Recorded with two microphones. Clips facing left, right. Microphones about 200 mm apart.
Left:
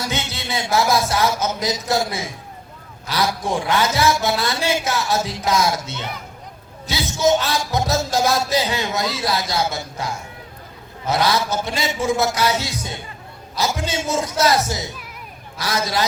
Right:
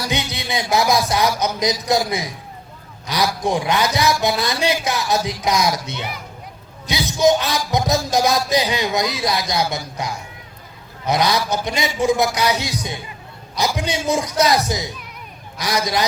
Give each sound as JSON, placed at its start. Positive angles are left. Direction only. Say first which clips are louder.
{"t": 0.1, "sound": "music", "louder": "right 2 dB", "side_deg": -15}
{"t": 0.7, "sound": "speech", "louder": "right 1 dB", "side_deg": -15}